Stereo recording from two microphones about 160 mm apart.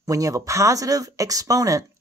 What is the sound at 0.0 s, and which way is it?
Speech, 20° right (ahead or behind).